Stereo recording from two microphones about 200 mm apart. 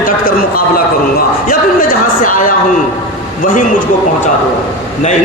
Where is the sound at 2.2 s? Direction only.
40° left (ahead or behind).